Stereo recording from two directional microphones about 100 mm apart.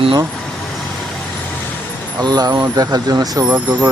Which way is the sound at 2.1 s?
45° right (ahead or behind).